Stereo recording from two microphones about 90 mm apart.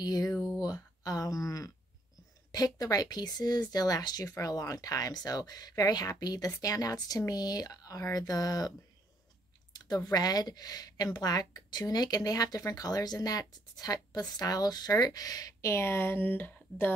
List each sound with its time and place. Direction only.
0.0 s speech: 45° left (ahead or behind)
0.6 s a sound: 45° left (ahead or behind)
2.5 s speech: 45° left (ahead or behind); by 16.9 s 20° left (ahead or behind)